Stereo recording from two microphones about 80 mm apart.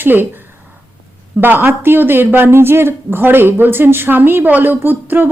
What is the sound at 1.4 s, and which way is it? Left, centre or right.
A woman's voice, right.